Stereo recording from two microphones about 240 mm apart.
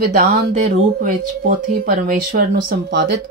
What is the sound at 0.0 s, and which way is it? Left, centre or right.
A woman's voice, right.